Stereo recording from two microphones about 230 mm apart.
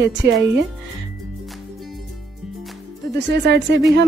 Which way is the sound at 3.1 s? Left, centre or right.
Right.